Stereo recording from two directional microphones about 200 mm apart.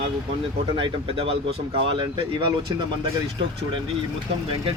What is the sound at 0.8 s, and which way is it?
Speech, 30° right (ahead or behind).